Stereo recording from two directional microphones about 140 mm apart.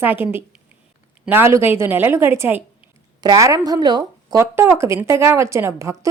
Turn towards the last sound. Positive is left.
turn(degrees=-20)  # may be behind; listen again after turning